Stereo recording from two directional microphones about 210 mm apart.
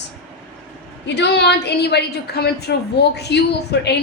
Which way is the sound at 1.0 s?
55° left (ahead or behind).